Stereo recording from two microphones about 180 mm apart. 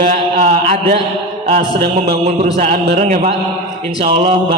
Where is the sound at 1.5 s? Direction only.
60° right (ahead or behind).